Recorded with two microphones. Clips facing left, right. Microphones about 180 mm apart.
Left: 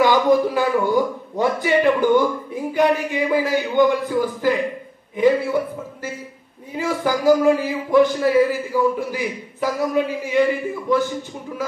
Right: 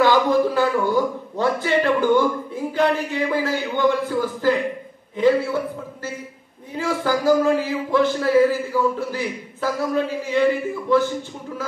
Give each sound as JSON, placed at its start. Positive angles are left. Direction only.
{"t": 0.0, "sound": "a man's voice", "side_deg": 15}
{"t": 6.7, "sound": "a man's voice", "side_deg": 15}